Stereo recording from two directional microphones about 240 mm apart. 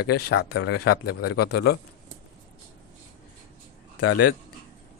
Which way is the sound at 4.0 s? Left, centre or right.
Left.